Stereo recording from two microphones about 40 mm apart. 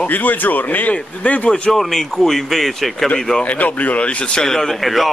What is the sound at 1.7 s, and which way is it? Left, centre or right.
Speech, centre.